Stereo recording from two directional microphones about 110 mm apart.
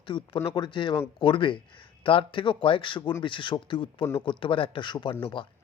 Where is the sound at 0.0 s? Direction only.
45° left (ahead or behind).